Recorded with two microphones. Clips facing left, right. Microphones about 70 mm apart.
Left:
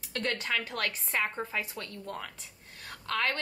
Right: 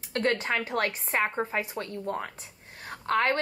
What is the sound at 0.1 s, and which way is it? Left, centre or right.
A woman's voice, right.